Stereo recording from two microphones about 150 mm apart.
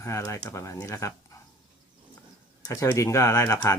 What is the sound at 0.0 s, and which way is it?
Speech, 20° left (ahead or behind).